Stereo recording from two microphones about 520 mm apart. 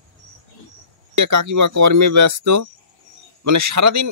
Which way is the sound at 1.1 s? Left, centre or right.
Right.